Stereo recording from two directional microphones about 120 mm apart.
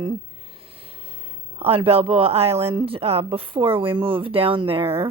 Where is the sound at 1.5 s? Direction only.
55° right (ahead or behind).